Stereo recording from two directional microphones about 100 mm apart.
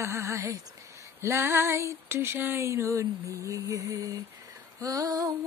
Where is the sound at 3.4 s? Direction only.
35° right (ahead or behind).